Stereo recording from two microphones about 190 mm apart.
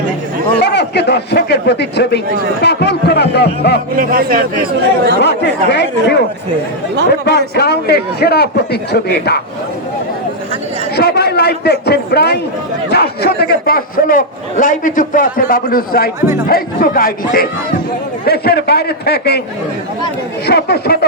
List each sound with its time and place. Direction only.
0.6 s a man's voice: 60° left (ahead or behind)
3.9 s speech: 50° right (ahead or behind)
5.2 s a man's voice: 65° left (ahead or behind)
10.9 s a man's voice: 60° left (ahead or behind)
20.5 s a man's voice: 60° left (ahead or behind)